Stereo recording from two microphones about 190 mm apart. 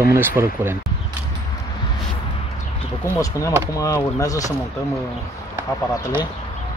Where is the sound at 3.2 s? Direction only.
15° left (ahead or behind).